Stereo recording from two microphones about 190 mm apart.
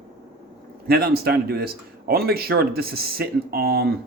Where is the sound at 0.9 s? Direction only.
55° right (ahead or behind).